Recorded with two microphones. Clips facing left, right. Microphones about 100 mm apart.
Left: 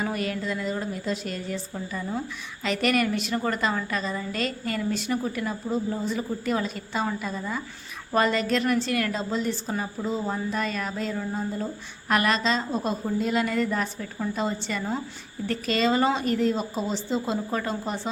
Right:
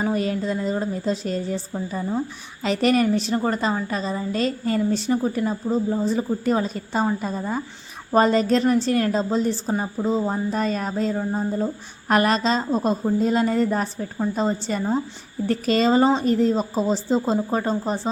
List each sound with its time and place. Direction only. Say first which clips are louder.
0.0 s a woman's voice: right 5 dB; 30° right (ahead or behind)